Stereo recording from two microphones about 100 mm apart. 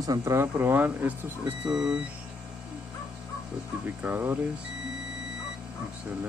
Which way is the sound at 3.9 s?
20° right (ahead or behind).